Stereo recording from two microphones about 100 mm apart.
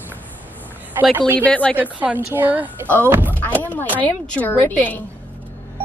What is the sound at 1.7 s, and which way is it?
A woman's voice, 15° right (ahead or behind).